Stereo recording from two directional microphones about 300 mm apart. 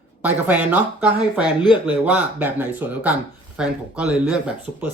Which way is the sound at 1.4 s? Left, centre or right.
Centre.